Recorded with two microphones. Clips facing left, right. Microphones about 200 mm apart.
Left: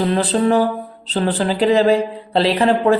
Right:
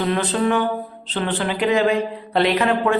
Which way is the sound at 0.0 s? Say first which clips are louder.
Left 3 dB; 35° left (ahead or behind).